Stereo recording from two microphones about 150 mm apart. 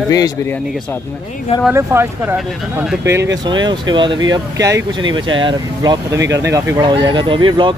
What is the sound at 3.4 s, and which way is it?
Speech, 30° right (ahead or behind).